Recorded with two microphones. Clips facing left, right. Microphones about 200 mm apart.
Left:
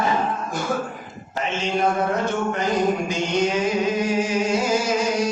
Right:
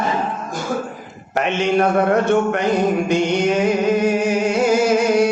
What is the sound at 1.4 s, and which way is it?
A man's voice, 65° right (ahead or behind).